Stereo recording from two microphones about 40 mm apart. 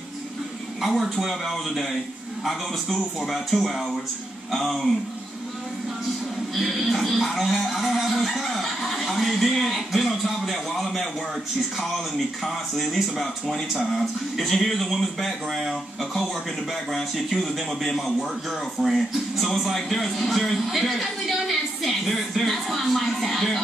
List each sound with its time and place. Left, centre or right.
0.7 s a man's voice: centre
6.5 s a man's voice: centre
12.4 s a man's voice: centre
18.8 s speech: right
19.3 s a man's voice: centre